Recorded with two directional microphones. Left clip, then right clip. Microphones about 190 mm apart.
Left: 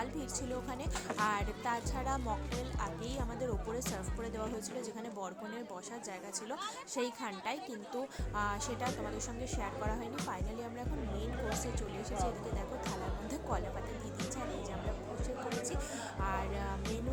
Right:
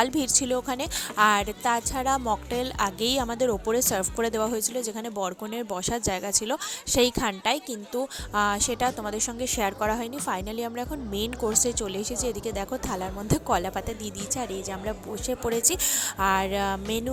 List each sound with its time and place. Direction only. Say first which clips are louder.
0.0 s speech: right 16 dB; 45° right (ahead or behind)
15.6 s speech: right 13 dB; 50° right (ahead or behind)